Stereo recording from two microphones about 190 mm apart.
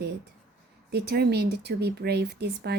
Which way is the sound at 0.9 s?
60° right (ahead or behind).